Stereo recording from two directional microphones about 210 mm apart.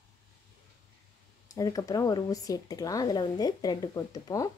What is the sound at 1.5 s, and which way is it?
Speech, 15° left (ahead or behind).